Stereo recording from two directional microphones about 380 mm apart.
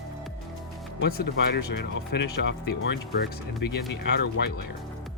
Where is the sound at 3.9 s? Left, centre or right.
Left.